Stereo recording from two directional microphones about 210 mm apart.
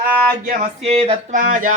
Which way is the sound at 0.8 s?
30° right (ahead or behind).